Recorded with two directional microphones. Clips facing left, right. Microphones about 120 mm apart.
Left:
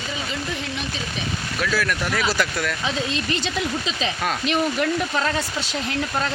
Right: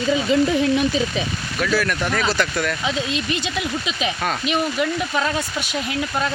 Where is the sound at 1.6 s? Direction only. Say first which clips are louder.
Right 3 dB; centre (ahead or behind).